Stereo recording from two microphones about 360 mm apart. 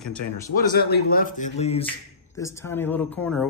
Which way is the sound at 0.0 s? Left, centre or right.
Centre.